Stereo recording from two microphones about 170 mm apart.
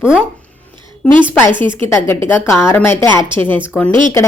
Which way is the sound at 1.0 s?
10° left (ahead or behind).